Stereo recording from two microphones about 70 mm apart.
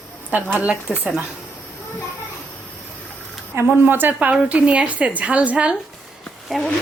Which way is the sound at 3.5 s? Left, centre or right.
Right.